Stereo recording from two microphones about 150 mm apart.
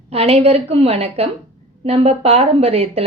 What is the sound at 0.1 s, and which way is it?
A woman's voice, 45° right (ahead or behind).